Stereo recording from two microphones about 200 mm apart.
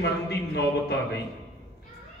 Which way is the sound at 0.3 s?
55° left (ahead or behind).